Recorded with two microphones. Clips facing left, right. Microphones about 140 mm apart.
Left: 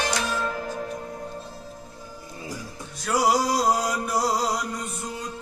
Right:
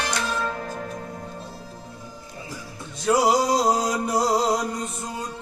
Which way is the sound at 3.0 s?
25° right (ahead or behind).